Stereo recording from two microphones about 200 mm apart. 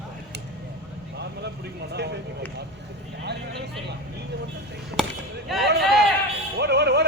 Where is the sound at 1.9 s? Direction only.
55° right (ahead or behind).